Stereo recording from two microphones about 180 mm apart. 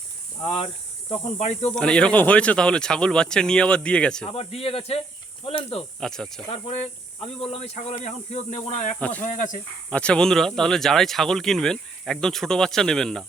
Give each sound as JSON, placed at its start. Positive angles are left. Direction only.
{"t": 0.4, "sound": "speech", "side_deg": 35}
{"t": 1.7, "sound": "speech", "side_deg": 5}
{"t": 4.3, "sound": "speech", "side_deg": 35}
{"t": 6.0, "sound": "speech", "side_deg": 5}
{"t": 6.5, "sound": "speech", "side_deg": 35}
{"t": 9.0, "sound": "speech", "side_deg": 5}
{"t": 9.2, "sound": "speech", "side_deg": 45}
{"t": 9.9, "sound": "speech", "side_deg": 5}